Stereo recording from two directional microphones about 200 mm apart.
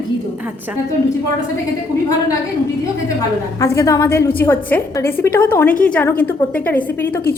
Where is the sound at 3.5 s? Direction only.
15° left (ahead or behind).